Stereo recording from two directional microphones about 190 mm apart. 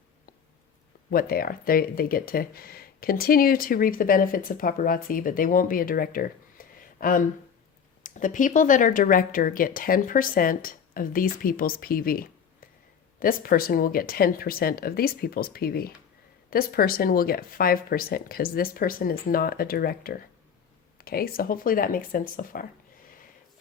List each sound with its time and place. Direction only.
1.1 s speech: 50° left (ahead or behind)